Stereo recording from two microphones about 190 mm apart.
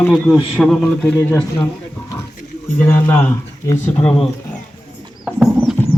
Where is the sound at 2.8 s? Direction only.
10° left (ahead or behind).